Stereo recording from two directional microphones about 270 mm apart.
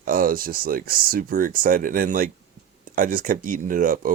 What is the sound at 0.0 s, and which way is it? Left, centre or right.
Speech, right.